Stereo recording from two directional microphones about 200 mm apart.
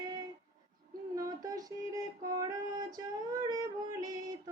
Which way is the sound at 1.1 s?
15° right (ahead or behind).